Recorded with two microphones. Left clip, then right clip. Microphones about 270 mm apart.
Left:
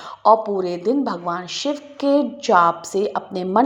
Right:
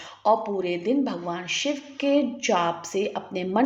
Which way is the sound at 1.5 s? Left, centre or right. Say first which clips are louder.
Left 2 dB; centre.